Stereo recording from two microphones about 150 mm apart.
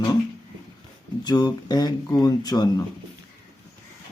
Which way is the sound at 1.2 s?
25° left (ahead or behind).